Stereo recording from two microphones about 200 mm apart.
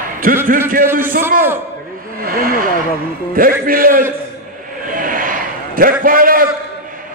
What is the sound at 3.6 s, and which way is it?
Speech, 45° right (ahead or behind).